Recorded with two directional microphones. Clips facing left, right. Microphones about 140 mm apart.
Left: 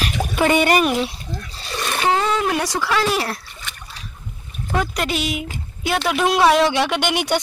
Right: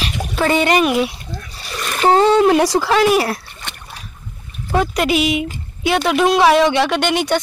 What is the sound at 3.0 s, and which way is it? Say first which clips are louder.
Speech: right 7 dB; 5° right (ahead or behind).